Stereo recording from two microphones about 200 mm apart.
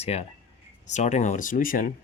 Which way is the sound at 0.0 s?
30° left (ahead or behind).